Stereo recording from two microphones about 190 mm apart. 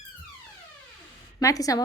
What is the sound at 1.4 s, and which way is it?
Speech, 20° left (ahead or behind).